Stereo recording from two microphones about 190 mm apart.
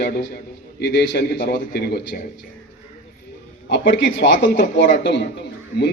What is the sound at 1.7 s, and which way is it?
Speech, 55° left (ahead or behind).